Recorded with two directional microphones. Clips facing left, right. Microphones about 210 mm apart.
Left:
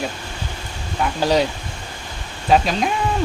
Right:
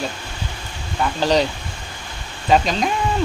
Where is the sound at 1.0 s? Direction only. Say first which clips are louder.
Even; 10° left (ahead or behind).